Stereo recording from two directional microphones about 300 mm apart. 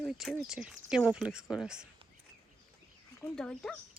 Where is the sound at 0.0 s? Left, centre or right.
Centre.